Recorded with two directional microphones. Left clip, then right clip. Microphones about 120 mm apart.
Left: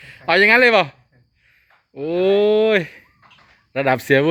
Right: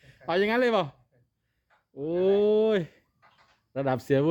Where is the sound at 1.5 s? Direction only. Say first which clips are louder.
Left 9 dB; 15° right (ahead or behind).